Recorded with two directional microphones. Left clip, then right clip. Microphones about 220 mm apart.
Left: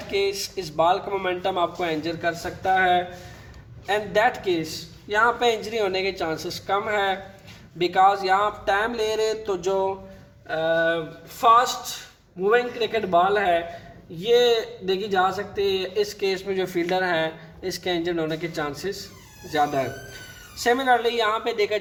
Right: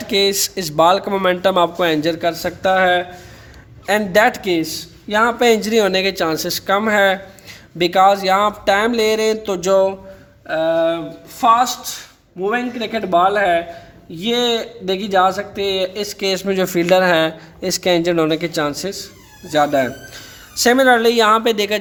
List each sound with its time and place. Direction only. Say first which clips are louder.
0.1 s a man's voice: right 8 dB; 55° right (ahead or behind)